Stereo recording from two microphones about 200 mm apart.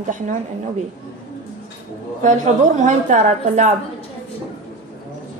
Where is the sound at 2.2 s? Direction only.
40° right (ahead or behind).